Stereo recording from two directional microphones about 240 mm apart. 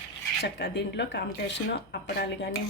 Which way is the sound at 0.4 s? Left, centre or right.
Left.